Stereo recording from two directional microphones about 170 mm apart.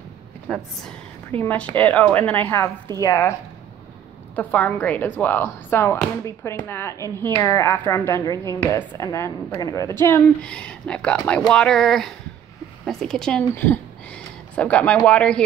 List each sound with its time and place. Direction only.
0.5 s speech: 5° left (ahead or behind)
4.4 s speech: 10° left (ahead or behind)